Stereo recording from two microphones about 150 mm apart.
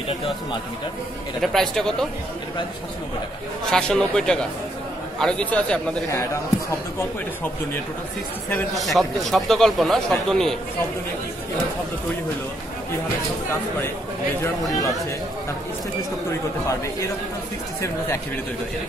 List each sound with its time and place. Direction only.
1.4 s speech: centre (ahead or behind)
3.7 s speech: 5° left (ahead or behind)
8.7 s speech: centre (ahead or behind)
14.4 s speech: 20° left (ahead or behind)